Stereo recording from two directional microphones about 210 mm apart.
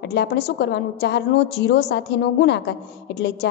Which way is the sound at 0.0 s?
55° left (ahead or behind).